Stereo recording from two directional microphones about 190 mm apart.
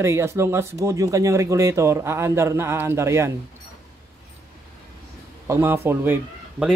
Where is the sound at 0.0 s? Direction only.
15° right (ahead or behind).